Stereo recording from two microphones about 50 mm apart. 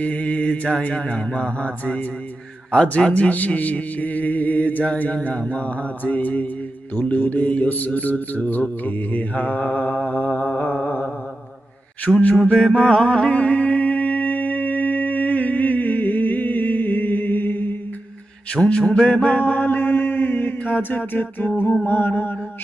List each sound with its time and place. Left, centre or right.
0.0 s mantra: left
2.7 s speech: centre
4.9 s mantra: left
6.9 s speech: left
8.8 s mantra: left
12.5 s music: centre; by 17.7 s left
18.6 s mantra: centre
19.2 s mantra: left
21.8 s music: left